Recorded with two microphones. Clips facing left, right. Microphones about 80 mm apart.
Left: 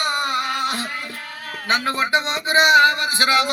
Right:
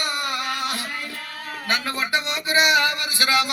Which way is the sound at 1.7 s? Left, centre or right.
Left.